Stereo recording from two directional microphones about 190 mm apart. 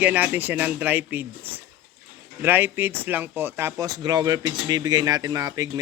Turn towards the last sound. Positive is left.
turn(degrees=-20)  # may be behind; listen again after turning